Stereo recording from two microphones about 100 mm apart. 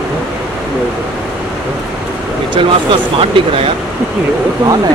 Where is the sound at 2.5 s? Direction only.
55° right (ahead or behind).